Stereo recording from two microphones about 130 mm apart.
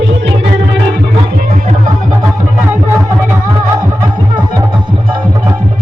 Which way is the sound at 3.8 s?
30° right (ahead or behind).